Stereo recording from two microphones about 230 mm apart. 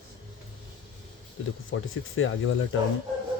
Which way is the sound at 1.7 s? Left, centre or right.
Left.